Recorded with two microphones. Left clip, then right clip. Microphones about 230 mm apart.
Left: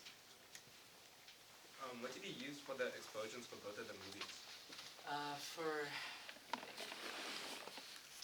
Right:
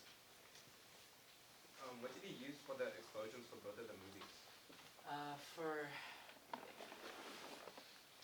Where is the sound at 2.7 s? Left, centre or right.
Left.